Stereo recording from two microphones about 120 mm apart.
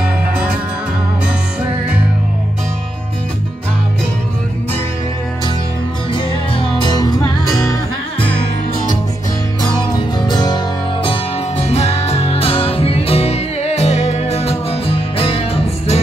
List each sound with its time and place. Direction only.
6.1 s music: 40° left (ahead or behind)
10.1 s music: 35° left (ahead or behind)
11.1 s music: 60° left (ahead or behind)